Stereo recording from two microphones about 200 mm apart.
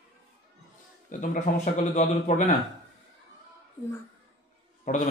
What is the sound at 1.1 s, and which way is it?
Speech, 40° left (ahead or behind).